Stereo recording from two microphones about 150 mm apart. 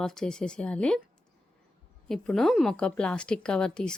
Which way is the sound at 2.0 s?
5° left (ahead or behind).